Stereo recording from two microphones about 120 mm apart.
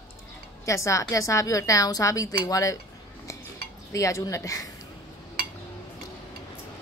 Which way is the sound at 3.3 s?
25° left (ahead or behind).